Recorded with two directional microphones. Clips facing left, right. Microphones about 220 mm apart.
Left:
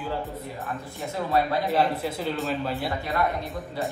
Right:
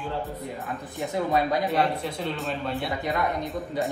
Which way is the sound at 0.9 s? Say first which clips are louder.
Right 1 dB; 15° right (ahead or behind).